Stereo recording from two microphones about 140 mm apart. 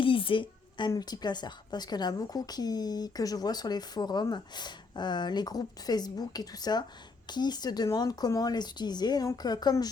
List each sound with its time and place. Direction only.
0.0 s a woman's voice: 40° left (ahead or behind)